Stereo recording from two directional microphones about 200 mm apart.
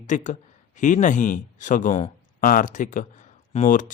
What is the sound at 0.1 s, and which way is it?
Speech, 40° left (ahead or behind).